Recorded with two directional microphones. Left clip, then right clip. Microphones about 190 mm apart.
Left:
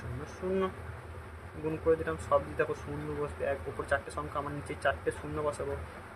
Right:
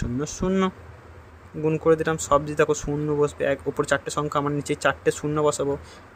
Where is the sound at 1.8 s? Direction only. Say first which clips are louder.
Right 8 dB; 60° right (ahead or behind).